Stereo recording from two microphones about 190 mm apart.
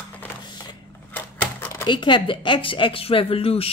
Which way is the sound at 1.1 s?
10° left (ahead or behind).